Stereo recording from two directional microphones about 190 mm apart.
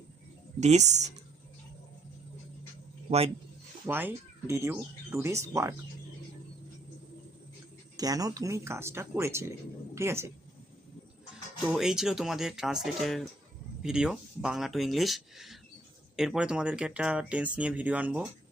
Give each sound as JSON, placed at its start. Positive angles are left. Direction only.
{"t": 0.6, "sound": "speech", "side_deg": -35}
{"t": 3.1, "sound": "speech", "side_deg": -30}
{"t": 3.8, "sound": "speech", "side_deg": -10}
{"t": 7.9, "sound": "a woman's voice", "side_deg": -20}
{"t": 11.6, "sound": "speech", "side_deg": -5}